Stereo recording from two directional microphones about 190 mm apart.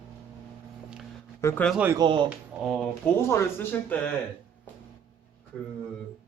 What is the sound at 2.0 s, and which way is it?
Speech, 25° right (ahead or behind).